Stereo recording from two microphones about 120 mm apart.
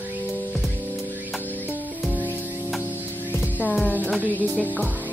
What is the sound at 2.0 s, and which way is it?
Music, 15° left (ahead or behind).